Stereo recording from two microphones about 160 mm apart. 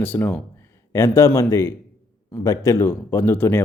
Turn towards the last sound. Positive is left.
turn(degrees=15)  # may be behind; listen again after turning